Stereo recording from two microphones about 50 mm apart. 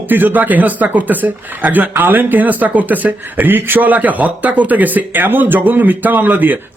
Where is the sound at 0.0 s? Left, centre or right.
Right.